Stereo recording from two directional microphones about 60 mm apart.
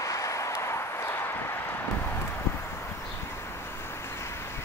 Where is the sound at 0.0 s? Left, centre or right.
Left.